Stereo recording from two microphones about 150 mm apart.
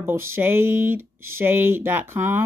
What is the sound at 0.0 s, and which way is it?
Speech, 15° right (ahead or behind).